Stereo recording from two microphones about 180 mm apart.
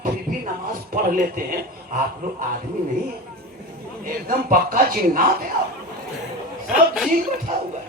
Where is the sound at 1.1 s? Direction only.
50° right (ahead or behind).